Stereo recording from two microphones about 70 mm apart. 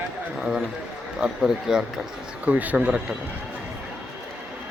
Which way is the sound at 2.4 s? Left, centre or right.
Right.